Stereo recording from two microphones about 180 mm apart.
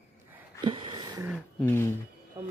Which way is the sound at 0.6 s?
30° right (ahead or behind).